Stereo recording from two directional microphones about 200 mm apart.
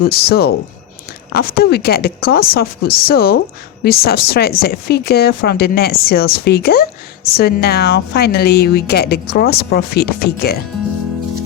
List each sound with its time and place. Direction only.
0.1 s a woman's voice: 50° left (ahead or behind)